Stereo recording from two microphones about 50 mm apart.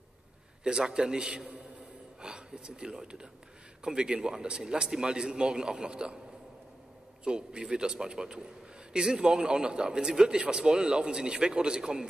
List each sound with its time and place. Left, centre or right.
0.7 s a man's voice: centre
7.2 s a man's voice: centre